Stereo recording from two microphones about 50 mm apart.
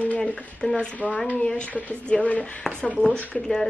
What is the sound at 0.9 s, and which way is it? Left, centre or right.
A woman's voice, left.